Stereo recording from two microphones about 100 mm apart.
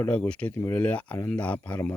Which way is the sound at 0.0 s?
15° left (ahead or behind).